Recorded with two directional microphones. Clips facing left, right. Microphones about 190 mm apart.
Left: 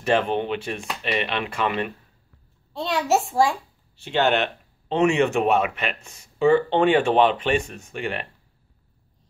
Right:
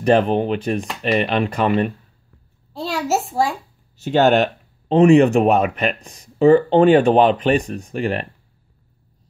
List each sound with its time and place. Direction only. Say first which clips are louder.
0.0 s speech: right 6 dB; 40° right (ahead or behind)
2.7 s a child's voice: even; centre (ahead or behind)
3.9 s speech: right 6 dB; 40° right (ahead or behind)